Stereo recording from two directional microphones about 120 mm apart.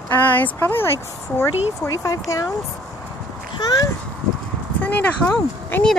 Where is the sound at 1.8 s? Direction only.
25° left (ahead or behind).